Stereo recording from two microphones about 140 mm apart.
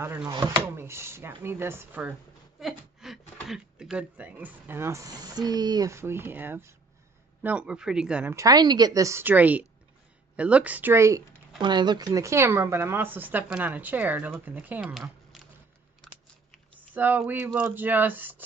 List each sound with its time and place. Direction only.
0.0 s speech: 15° right (ahead or behind)
0.3 s speech: 30° right (ahead or behind)
0.7 s speech: 20° right (ahead or behind)
8.4 s a woman's voice: 25° right (ahead or behind)
11.6 s speech: 30° right (ahead or behind); by 15.0 s 10° right (ahead or behind)
15.3 s a sound: centre (ahead or behind)
16.9 s speech: 10° right (ahead or behind)